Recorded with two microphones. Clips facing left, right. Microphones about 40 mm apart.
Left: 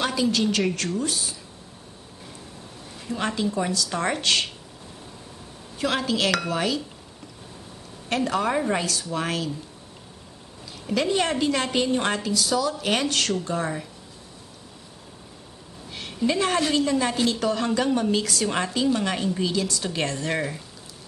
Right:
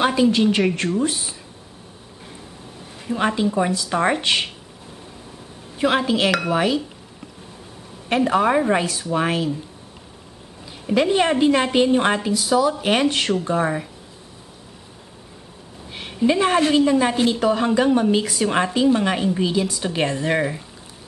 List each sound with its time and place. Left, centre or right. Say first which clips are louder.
0.0 s a woman's voice: right 6 dB; right
3.1 s a woman's voice: right 6 dB; right
5.8 s a woman's voice: right 5 dB; right
8.1 s a woman's voice: right 6 dB; right
10.9 s a woman's voice: right 5 dB; right
15.9 s a woman's voice: right 5 dB; centre